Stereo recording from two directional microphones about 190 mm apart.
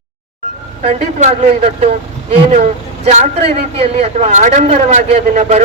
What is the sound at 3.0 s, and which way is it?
A woman's voice, 35° right (ahead or behind).